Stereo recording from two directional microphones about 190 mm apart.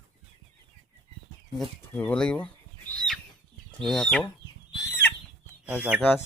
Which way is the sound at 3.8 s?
5° left (ahead or behind).